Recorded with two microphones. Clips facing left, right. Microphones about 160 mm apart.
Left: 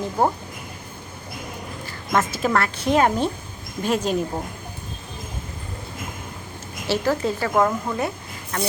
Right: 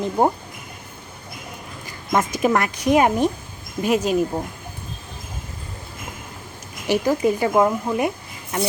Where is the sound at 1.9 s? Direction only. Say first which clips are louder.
Right 1 dB; 15° right (ahead or behind).